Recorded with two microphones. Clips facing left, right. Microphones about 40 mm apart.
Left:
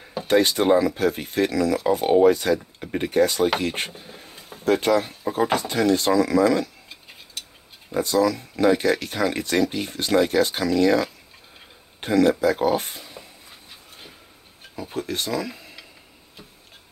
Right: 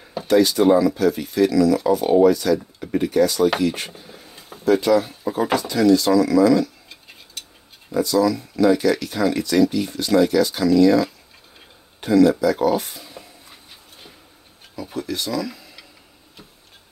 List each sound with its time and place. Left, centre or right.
0.3 s speech: left
3.9 s a sound: left
4.6 s speech: left
7.9 s speech: left
15.0 s speech: left